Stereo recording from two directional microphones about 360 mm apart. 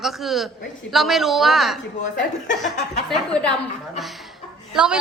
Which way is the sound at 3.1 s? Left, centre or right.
Centre.